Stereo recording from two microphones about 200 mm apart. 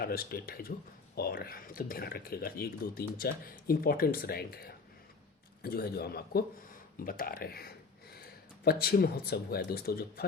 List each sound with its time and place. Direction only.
0.0 s speech: 50° left (ahead or behind)